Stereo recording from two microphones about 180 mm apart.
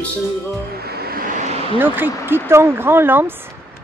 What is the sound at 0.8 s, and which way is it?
Vehicle, 60° right (ahead or behind).